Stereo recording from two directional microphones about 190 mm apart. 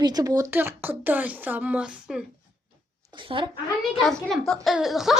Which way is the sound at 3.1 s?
25° right (ahead or behind).